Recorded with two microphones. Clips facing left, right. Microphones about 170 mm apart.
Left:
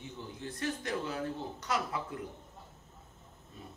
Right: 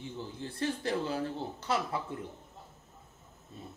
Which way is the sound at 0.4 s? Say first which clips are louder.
Right 2 dB; 30° right (ahead or behind).